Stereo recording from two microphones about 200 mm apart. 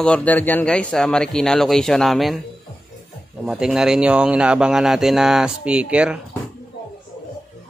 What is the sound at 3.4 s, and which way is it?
A man's voice, 5° right (ahead or behind).